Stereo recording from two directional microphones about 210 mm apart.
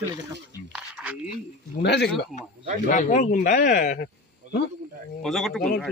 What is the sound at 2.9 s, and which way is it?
A man's voice, 35° left (ahead or behind).